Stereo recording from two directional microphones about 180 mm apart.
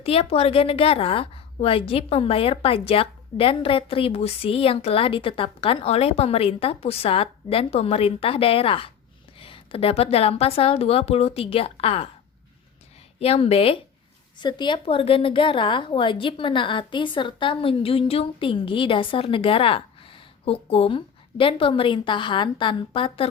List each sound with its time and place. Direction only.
0.0 s a woman's voice: 35° left (ahead or behind)
13.1 s a woman's voice: 35° left (ahead or behind)